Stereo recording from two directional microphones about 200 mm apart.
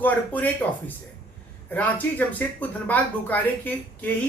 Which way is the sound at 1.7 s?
10° left (ahead or behind).